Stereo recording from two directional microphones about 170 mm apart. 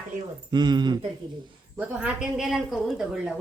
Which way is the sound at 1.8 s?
10° right (ahead or behind).